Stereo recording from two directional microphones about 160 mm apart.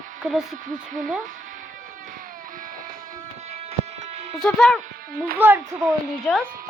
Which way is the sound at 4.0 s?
40° right (ahead or behind).